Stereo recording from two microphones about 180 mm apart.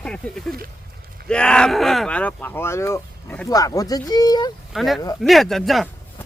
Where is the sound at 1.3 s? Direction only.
5° left (ahead or behind); by 4.5 s 20° left (ahead or behind).